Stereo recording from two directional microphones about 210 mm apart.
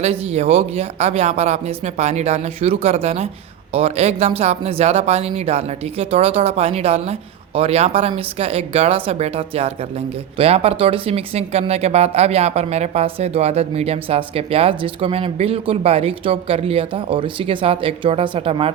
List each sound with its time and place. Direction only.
0.0 s speech: 30° right (ahead or behind)